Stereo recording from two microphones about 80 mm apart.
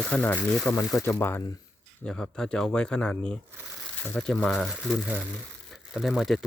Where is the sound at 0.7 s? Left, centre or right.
Left.